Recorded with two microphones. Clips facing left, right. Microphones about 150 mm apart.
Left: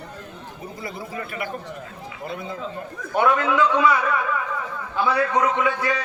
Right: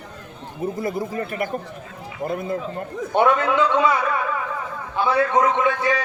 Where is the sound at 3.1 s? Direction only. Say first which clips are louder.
Right 2 dB; 25° right (ahead or behind).